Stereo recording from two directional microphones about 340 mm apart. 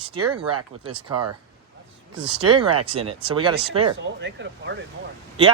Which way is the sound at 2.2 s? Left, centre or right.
Right.